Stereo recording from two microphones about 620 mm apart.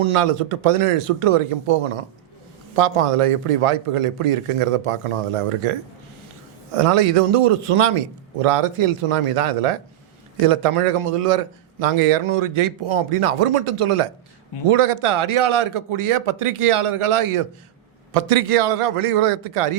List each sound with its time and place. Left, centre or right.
0.0 s a man's voice: right